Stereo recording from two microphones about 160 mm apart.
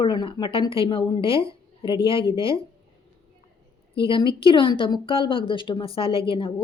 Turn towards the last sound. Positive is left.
turn(degrees=35)  # may be behind; listen again after turning